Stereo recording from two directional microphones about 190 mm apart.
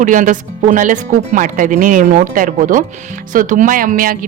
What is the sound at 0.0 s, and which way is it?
Speech, 45° right (ahead or behind).